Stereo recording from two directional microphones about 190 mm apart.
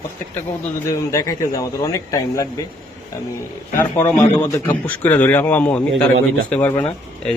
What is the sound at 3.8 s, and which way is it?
A man's voice, 10° left (ahead or behind).